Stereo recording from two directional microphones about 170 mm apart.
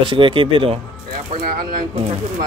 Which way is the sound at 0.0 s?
30° right (ahead or behind).